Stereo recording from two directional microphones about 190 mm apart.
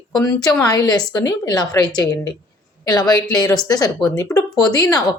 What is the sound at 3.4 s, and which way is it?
Speech, 20° left (ahead or behind).